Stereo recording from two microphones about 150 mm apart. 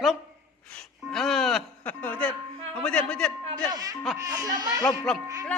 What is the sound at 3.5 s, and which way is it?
Speech, 25° right (ahead or behind).